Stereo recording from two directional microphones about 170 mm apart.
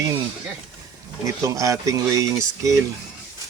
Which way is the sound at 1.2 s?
20° right (ahead or behind).